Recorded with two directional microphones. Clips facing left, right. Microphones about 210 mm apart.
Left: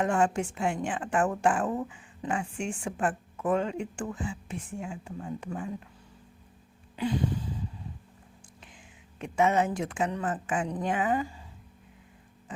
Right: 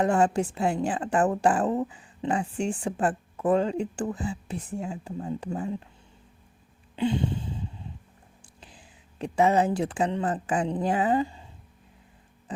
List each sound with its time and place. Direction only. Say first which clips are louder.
0.0 s a woman's voice: right 3 dB; 35° right (ahead or behind)
6.9 s a sound: right 3 dB; 25° right (ahead or behind)
8.6 s speech: right 4 dB; 35° right (ahead or behind)
12.5 s music: right 5 dB; 35° right (ahead or behind)